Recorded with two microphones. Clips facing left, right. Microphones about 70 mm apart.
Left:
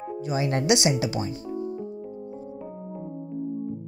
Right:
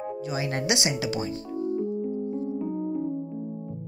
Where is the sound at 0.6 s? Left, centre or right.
Right.